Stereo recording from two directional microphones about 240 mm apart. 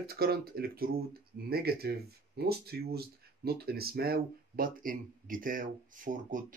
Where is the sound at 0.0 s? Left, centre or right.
Right.